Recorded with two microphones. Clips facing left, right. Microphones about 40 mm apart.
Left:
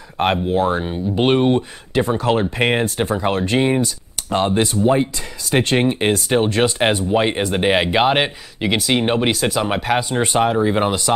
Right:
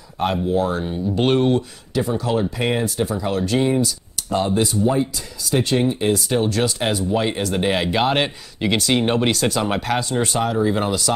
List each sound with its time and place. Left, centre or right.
0.2 s speech: left
2.0 s speech: left
6.2 s speech: left